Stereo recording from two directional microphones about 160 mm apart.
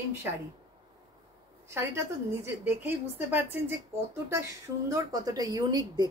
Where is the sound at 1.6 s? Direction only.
15° right (ahead or behind).